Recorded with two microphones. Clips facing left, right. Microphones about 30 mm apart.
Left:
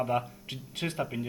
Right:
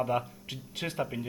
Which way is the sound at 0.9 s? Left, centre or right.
Centre.